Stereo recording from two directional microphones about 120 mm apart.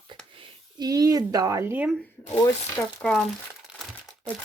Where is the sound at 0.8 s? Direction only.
30° right (ahead or behind).